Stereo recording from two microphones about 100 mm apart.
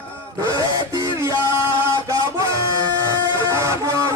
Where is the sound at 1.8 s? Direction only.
30° right (ahead or behind).